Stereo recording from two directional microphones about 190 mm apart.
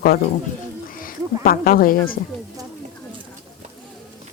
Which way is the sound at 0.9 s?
50° left (ahead or behind).